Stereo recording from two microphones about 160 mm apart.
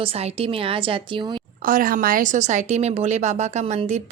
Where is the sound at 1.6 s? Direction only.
60° right (ahead or behind).